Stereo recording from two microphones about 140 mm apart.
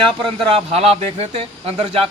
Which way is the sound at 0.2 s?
45° right (ahead or behind).